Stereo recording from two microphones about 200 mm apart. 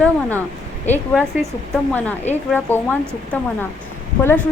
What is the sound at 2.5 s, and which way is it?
Speech, 10° left (ahead or behind).